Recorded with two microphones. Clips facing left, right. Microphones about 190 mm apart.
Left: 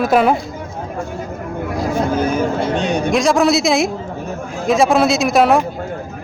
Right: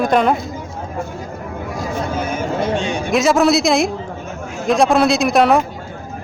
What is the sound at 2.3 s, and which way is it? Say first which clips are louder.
Speech: left 2 dB; 40° left (ahead or behind).